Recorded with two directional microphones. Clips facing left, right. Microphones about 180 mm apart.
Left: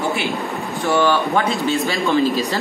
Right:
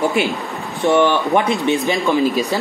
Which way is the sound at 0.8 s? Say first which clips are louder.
Right 3 dB; 20° right (ahead or behind).